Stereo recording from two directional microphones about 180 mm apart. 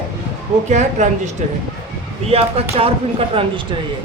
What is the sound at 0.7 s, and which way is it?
Speech, 40° right (ahead or behind).